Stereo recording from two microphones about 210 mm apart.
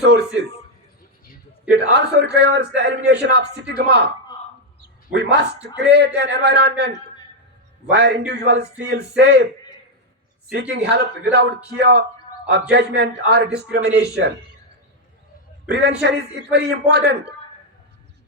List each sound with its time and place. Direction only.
0.0 s a sound: 55° right (ahead or behind)
1.7 s a man's voice: 55° right (ahead or behind)
5.1 s a man's voice: 55° right (ahead or behind)
10.5 s a man's voice: 55° right (ahead or behind)
15.6 s a man's voice: 50° right (ahead or behind)